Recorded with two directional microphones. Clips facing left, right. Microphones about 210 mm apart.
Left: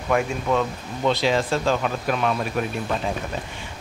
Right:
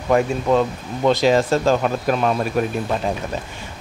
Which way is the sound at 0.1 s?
35° right (ahead or behind).